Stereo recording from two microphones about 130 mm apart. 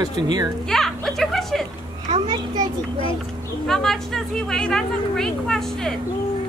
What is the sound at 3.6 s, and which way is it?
A woman's voice, 5° left (ahead or behind).